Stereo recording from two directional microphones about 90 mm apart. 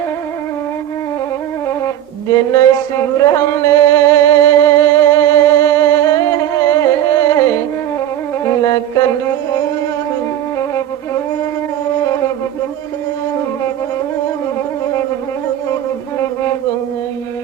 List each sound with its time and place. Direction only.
2.3 s singing: 40° left (ahead or behind)
8.4 s music: 40° left (ahead or behind)
10.6 s music: 35° left (ahead or behind)
15.7 s music: 35° left (ahead or behind)